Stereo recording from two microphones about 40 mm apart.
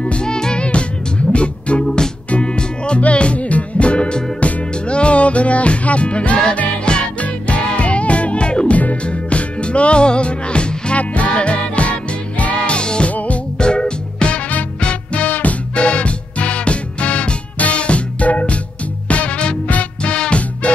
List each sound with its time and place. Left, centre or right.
0.0 s music: left
11.0 s music: left
12.7 s music: left
13.1 s music: left
13.6 s music: left
15.2 s music: left